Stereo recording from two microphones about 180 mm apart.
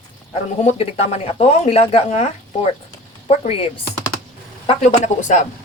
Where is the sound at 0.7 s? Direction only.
35° left (ahead or behind).